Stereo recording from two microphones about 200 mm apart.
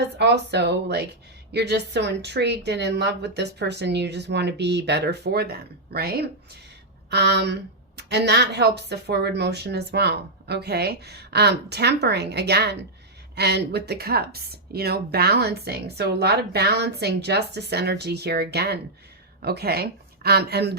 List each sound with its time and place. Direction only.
0.2 s speech: 55° right (ahead or behind)